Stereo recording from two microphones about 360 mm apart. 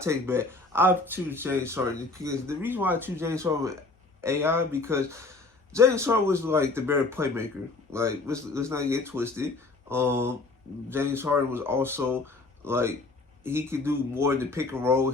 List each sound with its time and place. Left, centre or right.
0.0 s speech: centre